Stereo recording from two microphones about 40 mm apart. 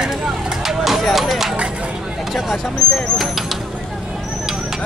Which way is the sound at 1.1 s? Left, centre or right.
Centre.